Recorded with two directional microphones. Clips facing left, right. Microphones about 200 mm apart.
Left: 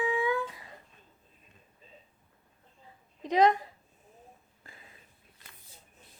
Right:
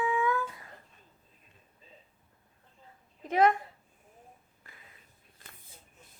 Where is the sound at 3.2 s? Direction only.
15° left (ahead or behind).